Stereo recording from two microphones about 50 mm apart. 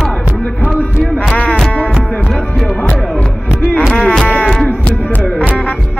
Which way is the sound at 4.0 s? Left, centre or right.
Centre.